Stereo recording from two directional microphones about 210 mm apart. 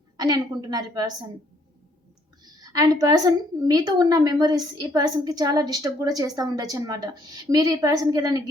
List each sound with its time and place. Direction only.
0.2 s a woman's voice: 20° right (ahead or behind)
2.4 s a woman's voice: 20° right (ahead or behind)